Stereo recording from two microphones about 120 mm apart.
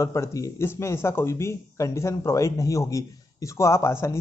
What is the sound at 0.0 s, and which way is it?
Speech, 25° left (ahead or behind).